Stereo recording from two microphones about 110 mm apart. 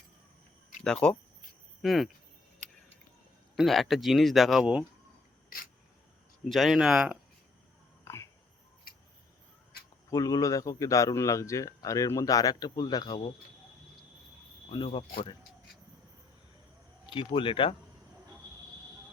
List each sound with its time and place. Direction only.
0.9 s speech: 5° left (ahead or behind)
3.5 s speech: centre (ahead or behind)
4.6 s speech: 10° right (ahead or behind)
6.5 s speech: centre (ahead or behind)
8.0 s a sound: 25° left (ahead or behind)
10.1 s a man's voice: 35° left (ahead or behind)
17.1 s speech: 50° left (ahead or behind)